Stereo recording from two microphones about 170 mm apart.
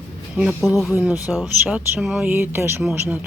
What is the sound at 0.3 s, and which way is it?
A woman's voice, centre (ahead or behind).